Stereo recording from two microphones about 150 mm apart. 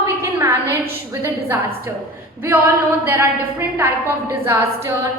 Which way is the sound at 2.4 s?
15° right (ahead or behind).